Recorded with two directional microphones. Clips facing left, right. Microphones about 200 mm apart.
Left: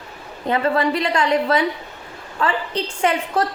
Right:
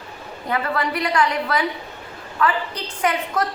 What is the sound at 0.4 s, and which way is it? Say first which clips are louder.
A woman's voice: left 5 dB; 25° left (ahead or behind).